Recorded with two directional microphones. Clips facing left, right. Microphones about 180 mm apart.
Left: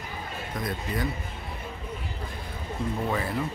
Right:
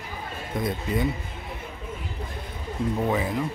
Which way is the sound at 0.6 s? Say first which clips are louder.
Right 5 dB; 25° right (ahead or behind).